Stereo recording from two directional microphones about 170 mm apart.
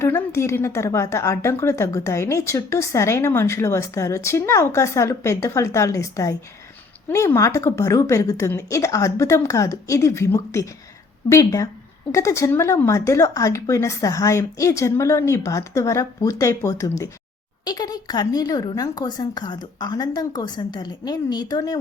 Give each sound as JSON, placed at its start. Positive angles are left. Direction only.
{"t": 0.0, "sound": "a woman's voice", "side_deg": 15}